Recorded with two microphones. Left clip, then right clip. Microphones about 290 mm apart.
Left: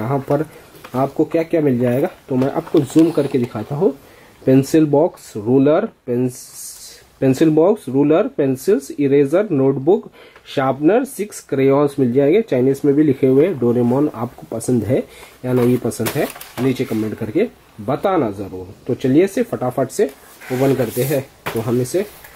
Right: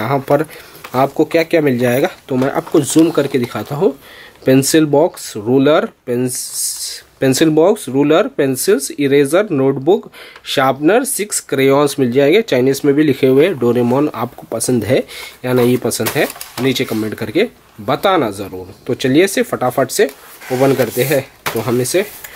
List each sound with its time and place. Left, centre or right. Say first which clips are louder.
0.0 s speech: right 5 dB; centre
1.1 s speech: right 4 dB; left
1.4 s speech: right 3 dB; centre
3.3 s speech: right 2 dB; centre
4.5 s speech: right 2 dB; centre
9.8 s speech: right 2 dB; left
10.5 s speech: right 3 dB; centre
16.0 s speech: right 4 dB; centre